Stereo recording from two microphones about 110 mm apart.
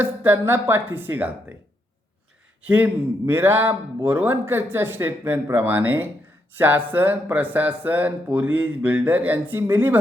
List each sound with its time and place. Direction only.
0.0 s speech: 20° right (ahead or behind)
2.6 s speech: 15° right (ahead or behind)